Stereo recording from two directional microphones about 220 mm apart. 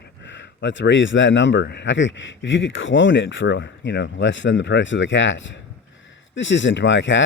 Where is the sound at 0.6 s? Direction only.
55° left (ahead or behind).